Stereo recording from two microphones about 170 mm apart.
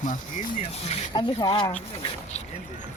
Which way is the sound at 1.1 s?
30° left (ahead or behind).